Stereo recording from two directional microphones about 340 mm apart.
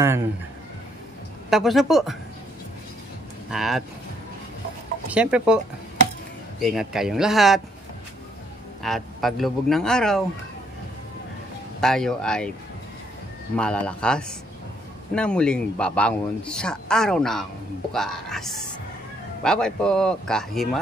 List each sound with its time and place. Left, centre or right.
1.5 s a man's voice: centre
3.4 s a man's voice: centre
5.1 s a man's voice: centre
6.6 s a man's voice: centre
8.8 s a man's voice: centre
11.8 s a man's voice: centre
13.6 s a man's voice: centre